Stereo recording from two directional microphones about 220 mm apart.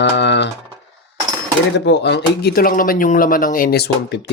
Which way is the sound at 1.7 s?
50° left (ahead or behind).